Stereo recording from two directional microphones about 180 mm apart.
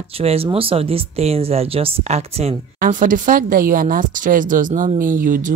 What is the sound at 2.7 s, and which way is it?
Speech, 50° right (ahead or behind).